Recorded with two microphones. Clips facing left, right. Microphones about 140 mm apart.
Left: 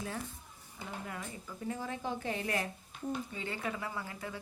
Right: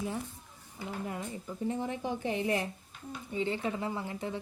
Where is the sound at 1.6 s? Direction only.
25° right (ahead or behind).